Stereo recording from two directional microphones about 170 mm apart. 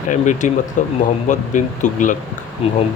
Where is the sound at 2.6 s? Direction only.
35° left (ahead or behind).